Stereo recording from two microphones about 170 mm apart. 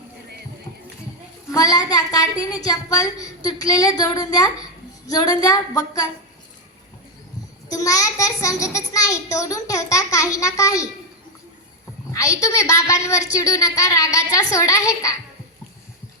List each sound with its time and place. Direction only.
1.5 s a child's voice: 20° left (ahead or behind)
7.7 s a child's voice: 20° left (ahead or behind)
12.1 s a child's voice: 20° left (ahead or behind)